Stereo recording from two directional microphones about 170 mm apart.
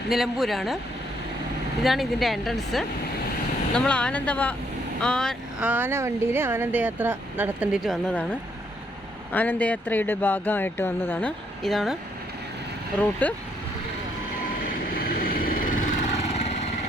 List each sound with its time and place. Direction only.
0.1 s speech: centre (ahead or behind)
1.8 s speech: centre (ahead or behind)
13.0 s speech: 10° left (ahead or behind)
14.6 s vehicle: 60° left (ahead or behind); by 16.6 s 40° left (ahead or behind)